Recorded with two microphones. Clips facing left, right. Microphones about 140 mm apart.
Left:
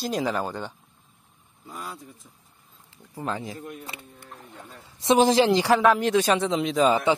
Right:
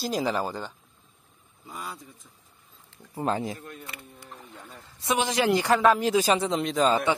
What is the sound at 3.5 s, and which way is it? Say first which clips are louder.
Speech: left 5 dB; 15° left (ahead or behind).